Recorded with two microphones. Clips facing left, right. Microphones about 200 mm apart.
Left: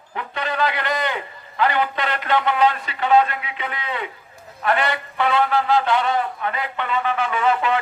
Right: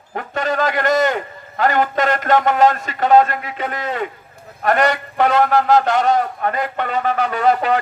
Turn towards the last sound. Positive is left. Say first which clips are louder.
# right 4 dB
turn(degrees=-40)  # may be behind; listen again after turning